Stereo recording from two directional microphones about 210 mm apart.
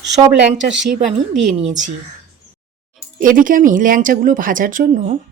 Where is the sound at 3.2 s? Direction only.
40° right (ahead or behind).